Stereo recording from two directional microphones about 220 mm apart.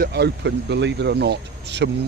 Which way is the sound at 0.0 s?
50° right (ahead or behind).